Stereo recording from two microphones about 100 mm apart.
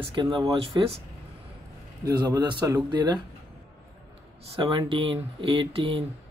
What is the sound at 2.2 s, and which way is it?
Speech, 40° right (ahead or behind).